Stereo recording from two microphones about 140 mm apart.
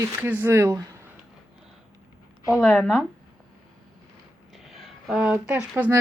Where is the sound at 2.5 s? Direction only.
5° left (ahead or behind).